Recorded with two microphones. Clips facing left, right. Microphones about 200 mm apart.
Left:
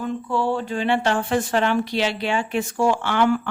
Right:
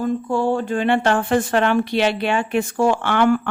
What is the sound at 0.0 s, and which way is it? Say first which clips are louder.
A woman's voice: right 4 dB; 45° right (ahead or behind).